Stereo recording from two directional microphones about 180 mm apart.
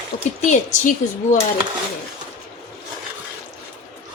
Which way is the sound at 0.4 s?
40° left (ahead or behind).